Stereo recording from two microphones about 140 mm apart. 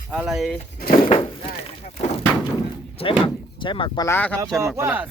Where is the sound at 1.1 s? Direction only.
40° left (ahead or behind).